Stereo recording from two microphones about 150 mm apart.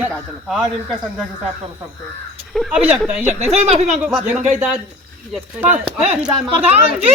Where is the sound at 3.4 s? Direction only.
45° right (ahead or behind).